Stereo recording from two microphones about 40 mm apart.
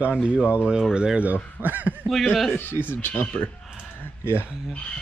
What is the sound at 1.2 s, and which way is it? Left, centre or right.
Speech, right.